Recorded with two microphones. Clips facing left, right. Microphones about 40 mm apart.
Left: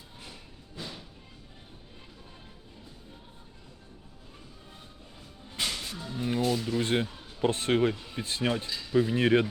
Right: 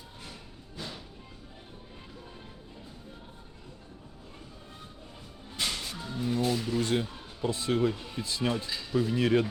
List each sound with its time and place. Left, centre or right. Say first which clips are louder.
0.8 s music: even; centre
5.6 s music: even; centre
6.1 s music: even; left
6.4 s music: left 2 dB; centre
6.7 s speech: left 1 dB; left
7.4 s speech: left 2 dB; left
8.4 s speech: left 1 dB; centre